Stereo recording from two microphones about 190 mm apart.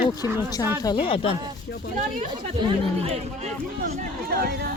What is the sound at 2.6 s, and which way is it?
Speech, 35° right (ahead or behind).